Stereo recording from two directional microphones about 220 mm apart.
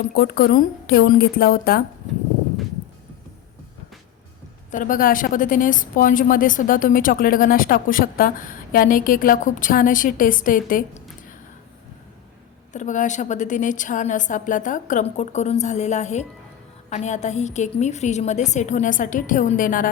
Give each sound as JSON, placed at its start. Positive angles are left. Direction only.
{"t": 0.0, "sound": "speech", "side_deg": 45}
{"t": 4.7, "sound": "a woman's voice", "side_deg": 35}
{"t": 12.7, "sound": "a woman's voice", "side_deg": 35}